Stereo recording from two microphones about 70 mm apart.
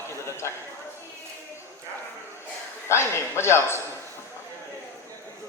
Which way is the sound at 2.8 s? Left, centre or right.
Left.